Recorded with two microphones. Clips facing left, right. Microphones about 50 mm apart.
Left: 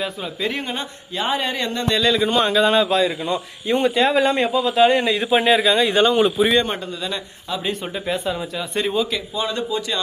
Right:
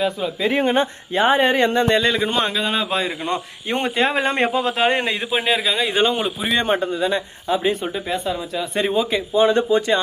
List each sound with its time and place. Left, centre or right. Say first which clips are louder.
0.6 s speech: right 9 dB; right
2.5 s speech: left 6 dB; centre
3.7 s speech: left 3 dB; right
5.3 s speech: left 5 dB; centre
6.7 s speech: right 7 dB; right
8.1 s speech: left 1 dB; centre
8.8 s speech: right 2 dB; centre; by 10.0 s right